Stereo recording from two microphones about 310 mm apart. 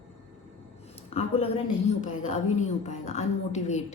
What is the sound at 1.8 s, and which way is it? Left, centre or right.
A woman's voice, left.